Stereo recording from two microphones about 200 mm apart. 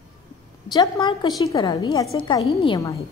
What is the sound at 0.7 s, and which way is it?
A woman's voice, 20° left (ahead or behind).